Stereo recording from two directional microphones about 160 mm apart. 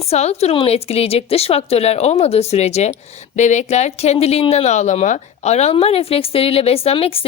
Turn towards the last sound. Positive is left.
turn(degrees=35)  # may be behind; listen again after turning